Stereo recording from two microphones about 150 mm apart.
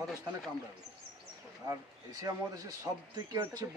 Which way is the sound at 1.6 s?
25° right (ahead or behind).